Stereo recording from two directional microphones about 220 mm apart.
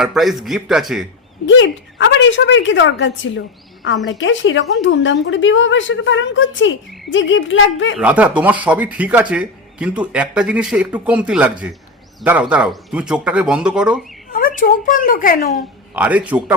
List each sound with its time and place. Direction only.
0.0 s speech: centre (ahead or behind)
1.5 s a woman's voice: 55° left (ahead or behind)
7.9 s speech: 5° right (ahead or behind)
14.3 s a woman's voice: 40° left (ahead or behind)
16.0 s speech: 5° right (ahead or behind)